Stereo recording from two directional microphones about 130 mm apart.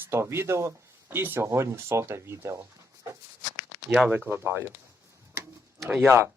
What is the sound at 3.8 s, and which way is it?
Speech, 10° right (ahead or behind).